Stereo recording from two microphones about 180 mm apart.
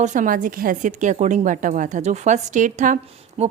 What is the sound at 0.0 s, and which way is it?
A woman's voice, 45° right (ahead or behind).